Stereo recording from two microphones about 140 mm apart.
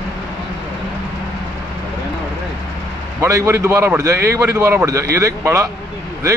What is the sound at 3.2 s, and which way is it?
A man's voice, 20° right (ahead or behind).